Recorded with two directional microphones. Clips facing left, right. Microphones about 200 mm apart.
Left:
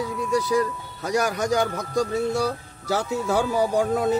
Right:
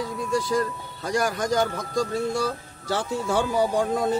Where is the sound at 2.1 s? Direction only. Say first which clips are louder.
Left 2 dB; 10° left (ahead or behind).